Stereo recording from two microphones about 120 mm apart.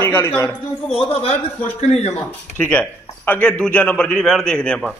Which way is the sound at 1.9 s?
65° left (ahead or behind).